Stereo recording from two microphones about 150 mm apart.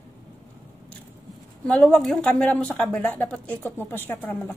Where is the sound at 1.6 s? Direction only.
5° left (ahead or behind).